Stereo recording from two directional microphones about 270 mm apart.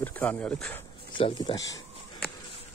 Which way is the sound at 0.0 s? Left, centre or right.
Centre.